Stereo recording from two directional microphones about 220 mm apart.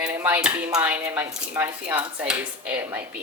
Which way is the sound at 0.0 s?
10° right (ahead or behind).